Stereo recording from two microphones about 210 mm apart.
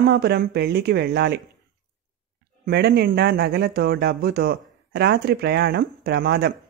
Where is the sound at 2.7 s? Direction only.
50° right (ahead or behind).